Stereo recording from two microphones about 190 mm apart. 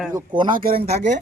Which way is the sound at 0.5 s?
50° right (ahead or behind).